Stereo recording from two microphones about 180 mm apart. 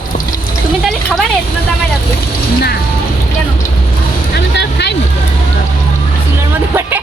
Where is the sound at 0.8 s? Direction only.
Centre (ahead or behind).